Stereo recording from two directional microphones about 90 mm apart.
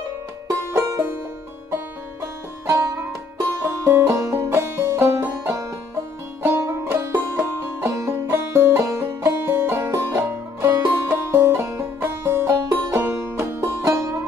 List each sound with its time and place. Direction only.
0.7 s music: 30° right (ahead or behind)
2.6 s music: 30° right (ahead or behind)
3.5 s banjo: 35° right (ahead or behind)
6.4 s music: 25° right (ahead or behind)